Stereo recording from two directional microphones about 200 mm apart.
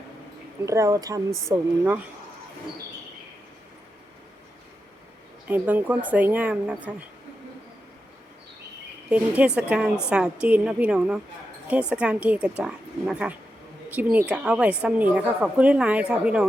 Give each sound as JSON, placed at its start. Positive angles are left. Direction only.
{"t": 0.6, "sound": "a woman's voice", "side_deg": -15}
{"t": 5.5, "sound": "a woman's voice", "side_deg": -10}
{"t": 9.0, "sound": "a woman's voice", "side_deg": -5}